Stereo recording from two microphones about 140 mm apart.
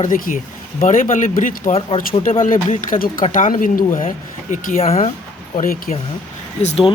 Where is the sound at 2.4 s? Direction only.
70° left (ahead or behind).